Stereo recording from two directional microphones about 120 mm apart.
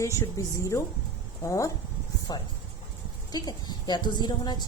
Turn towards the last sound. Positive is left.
turn(degrees=35)  # may be behind; listen again after turning